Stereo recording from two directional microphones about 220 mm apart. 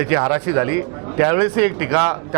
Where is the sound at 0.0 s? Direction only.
20° right (ahead or behind).